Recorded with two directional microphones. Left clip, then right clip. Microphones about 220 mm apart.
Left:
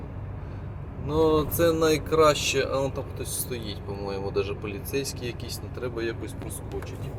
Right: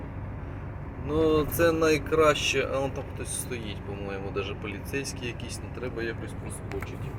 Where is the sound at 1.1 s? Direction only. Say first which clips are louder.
Left 2 dB; 20° left (ahead or behind).